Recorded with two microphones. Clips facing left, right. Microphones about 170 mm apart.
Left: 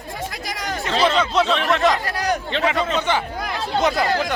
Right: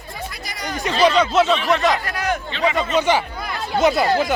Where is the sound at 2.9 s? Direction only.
10° right (ahead or behind).